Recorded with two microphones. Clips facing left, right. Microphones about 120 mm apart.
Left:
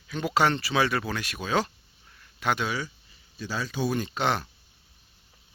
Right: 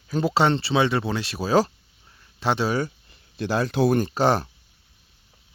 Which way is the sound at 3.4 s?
60° right (ahead or behind).